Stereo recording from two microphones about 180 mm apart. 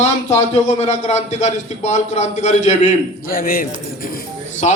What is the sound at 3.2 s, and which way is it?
A man's voice, 55° left (ahead or behind).